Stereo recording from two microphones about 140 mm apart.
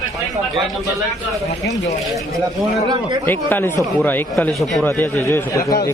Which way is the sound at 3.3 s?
15° left (ahead or behind).